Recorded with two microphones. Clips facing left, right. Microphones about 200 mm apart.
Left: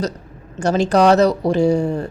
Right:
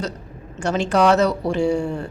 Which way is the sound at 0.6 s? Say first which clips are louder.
Left 3 dB; 40° left (ahead or behind).